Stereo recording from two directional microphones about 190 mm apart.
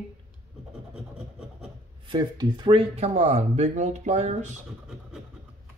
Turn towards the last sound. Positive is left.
turn(degrees=-35)  # may be behind; listen again after turning